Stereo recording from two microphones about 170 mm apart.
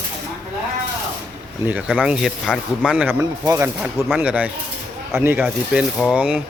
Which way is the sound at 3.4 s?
20° right (ahead or behind).